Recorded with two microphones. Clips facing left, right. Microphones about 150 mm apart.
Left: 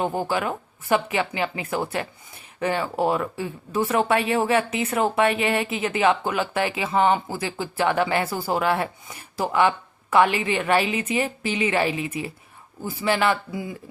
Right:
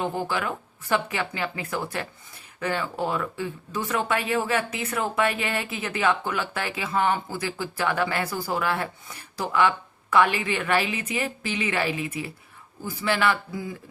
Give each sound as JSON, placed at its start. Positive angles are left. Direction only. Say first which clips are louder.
{"t": 0.0, "sound": "speech", "louder": "left 3 dB", "side_deg": 15}